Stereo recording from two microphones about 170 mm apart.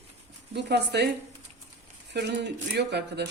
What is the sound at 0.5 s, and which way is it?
Speech, 85° right.